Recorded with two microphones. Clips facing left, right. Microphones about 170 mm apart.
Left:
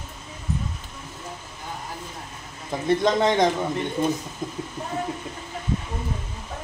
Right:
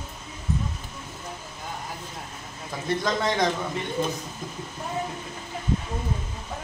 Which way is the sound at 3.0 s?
25° left (ahead or behind).